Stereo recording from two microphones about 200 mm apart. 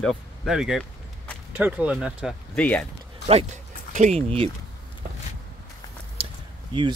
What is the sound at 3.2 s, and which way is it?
Speech, 35° right (ahead or behind).